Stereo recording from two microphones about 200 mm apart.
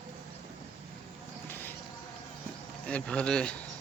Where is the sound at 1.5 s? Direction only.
10° left (ahead or behind).